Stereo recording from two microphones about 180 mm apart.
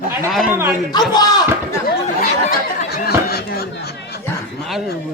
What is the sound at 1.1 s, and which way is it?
Speech, 20° left (ahead or behind).